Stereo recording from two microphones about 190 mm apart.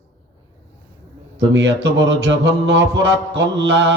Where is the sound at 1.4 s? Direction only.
70° right (ahead or behind).